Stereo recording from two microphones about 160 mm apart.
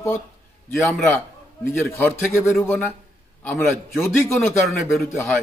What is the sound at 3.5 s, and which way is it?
A man's voice, centre (ahead or behind).